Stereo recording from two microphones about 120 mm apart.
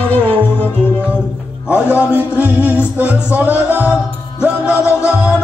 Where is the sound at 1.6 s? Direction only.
10° right (ahead or behind).